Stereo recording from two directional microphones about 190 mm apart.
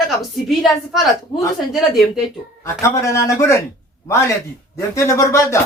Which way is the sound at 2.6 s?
15° left (ahead or behind).